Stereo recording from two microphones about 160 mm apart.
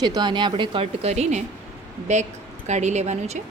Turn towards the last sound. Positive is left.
turn(degrees=-45)  # may be behind; listen again after turning